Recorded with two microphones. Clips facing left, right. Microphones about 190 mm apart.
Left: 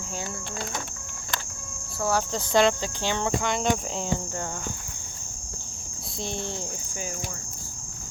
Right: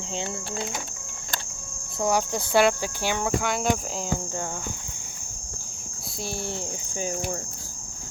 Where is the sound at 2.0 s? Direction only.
15° right (ahead or behind).